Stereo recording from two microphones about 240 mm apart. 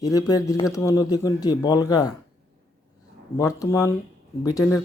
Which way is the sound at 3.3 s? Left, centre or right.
Centre.